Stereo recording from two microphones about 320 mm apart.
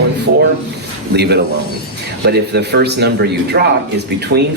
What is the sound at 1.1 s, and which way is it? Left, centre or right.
Speech, right.